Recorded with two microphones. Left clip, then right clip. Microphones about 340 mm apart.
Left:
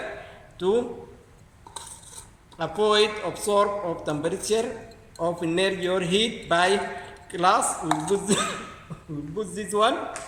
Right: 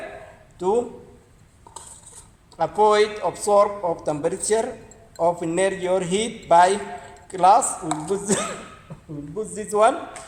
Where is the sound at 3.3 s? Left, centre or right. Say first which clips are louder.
Right 5 dB; centre.